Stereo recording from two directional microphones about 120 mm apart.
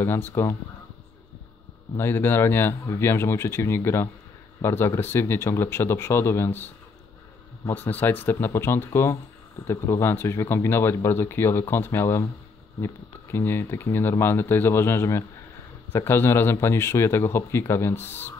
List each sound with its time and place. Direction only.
0.0 s speech: 20° left (ahead or behind)
0.3 s speech: 30° left (ahead or behind)
2.0 s speech: 20° left (ahead or behind)